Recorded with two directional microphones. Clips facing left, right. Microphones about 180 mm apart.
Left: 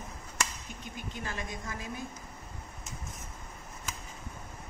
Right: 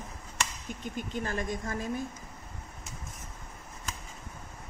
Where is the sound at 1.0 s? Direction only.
50° right (ahead or behind).